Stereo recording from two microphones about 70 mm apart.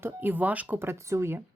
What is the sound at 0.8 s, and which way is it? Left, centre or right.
Speech, right.